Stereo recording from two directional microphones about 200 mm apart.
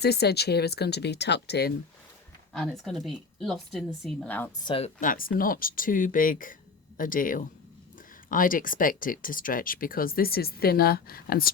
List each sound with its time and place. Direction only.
0.0 s speech: 55° left (ahead or behind)
2.5 s speech: centre (ahead or behind)
4.6 s speech: 25° left (ahead or behind)
4.9 s speech: 45° left (ahead or behind)